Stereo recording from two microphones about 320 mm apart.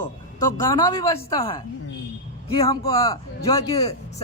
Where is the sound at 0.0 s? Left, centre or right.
Centre.